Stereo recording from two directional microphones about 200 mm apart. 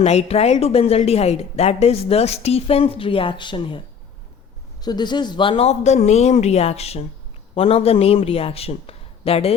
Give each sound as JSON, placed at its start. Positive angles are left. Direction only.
{"t": 0.0, "sound": "a woman's voice", "side_deg": 35}